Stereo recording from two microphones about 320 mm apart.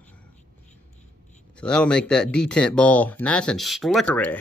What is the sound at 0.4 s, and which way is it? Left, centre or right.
Whispering, left.